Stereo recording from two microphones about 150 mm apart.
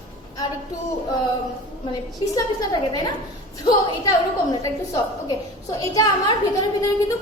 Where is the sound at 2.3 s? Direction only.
25° left (ahead or behind).